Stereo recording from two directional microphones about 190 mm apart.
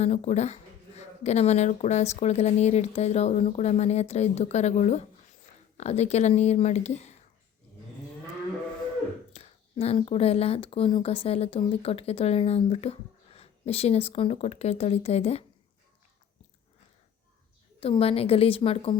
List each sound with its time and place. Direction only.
0.0 s speech: 35° left (ahead or behind)
9.3 s speech: 30° left (ahead or behind)
17.7 s speech: 30° left (ahead or behind)